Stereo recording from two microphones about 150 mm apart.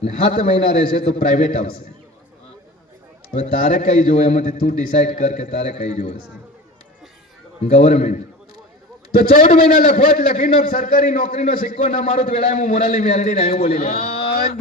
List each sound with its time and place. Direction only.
0.3 s a man's voice: 65° left (ahead or behind)
1.0 s a man's voice: 50° left (ahead or behind)
3.3 s a man's voice: 55° left (ahead or behind)
7.7 s a man's voice: 55° left (ahead or behind)
9.3 s a man's voice: 60° left (ahead or behind); by 13.8 s 45° left (ahead or behind)
14.0 s a sound: 40° left (ahead or behind)